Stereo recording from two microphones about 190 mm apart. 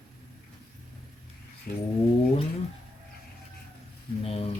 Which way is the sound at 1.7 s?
45° left (ahead or behind).